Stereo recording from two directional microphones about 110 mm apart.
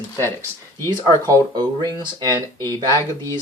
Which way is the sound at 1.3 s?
40° right (ahead or behind).